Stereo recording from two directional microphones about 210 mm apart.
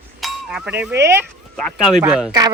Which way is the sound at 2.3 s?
20° right (ahead or behind).